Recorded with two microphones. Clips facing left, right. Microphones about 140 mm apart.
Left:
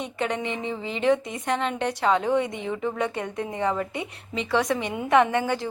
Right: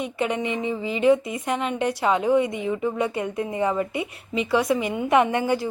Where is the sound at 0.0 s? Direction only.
5° right (ahead or behind).